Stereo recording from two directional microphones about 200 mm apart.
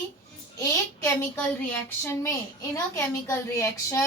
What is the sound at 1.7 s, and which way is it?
A woman's voice, 10° left (ahead or behind).